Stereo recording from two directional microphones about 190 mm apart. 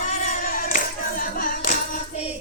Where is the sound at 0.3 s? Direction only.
50° left (ahead or behind).